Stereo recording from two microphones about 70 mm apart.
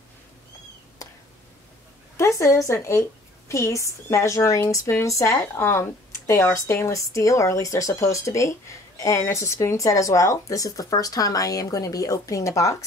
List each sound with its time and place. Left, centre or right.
2.1 s a woman's voice: left